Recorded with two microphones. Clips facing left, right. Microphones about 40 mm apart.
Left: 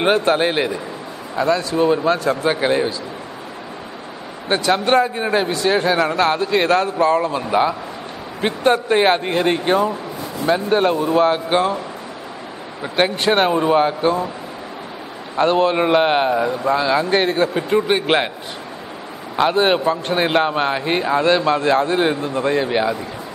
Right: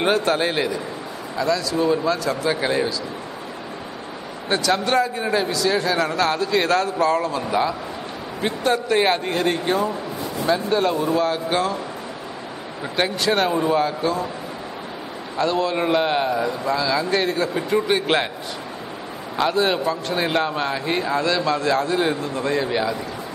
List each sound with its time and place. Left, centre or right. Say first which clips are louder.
0.0 s a man's voice: left 3 dB; left
4.5 s a man's voice: left 4 dB; left
10.7 s a man's voice: left 3 dB; left
12.9 s a man's voice: left 4 dB; left
15.3 s a man's voice: left 5 dB; left
16.3 s a man's voice: left 4 dB; left
16.7 s a man's voice: left 4 dB; left
17.6 s a man's voice: left 3 dB; left
19.3 s a man's voice: left 4 dB; left